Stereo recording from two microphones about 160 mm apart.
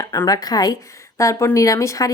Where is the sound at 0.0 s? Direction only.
20° left (ahead or behind).